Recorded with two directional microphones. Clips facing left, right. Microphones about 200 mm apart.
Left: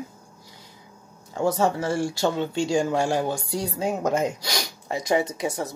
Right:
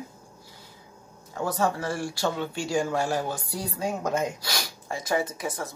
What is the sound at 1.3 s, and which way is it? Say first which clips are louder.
Speech: left 4 dB; 20° left (ahead or behind).